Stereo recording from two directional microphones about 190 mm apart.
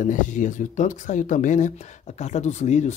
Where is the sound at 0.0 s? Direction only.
40° left (ahead or behind).